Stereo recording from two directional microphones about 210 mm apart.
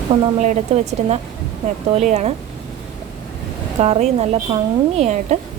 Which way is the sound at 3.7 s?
30° right (ahead or behind).